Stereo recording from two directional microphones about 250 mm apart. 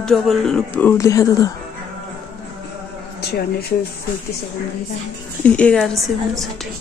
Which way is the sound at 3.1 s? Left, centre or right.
Left.